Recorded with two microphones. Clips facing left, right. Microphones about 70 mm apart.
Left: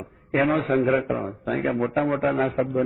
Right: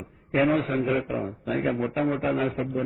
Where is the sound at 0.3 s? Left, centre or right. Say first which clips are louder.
Left 2 dB; left.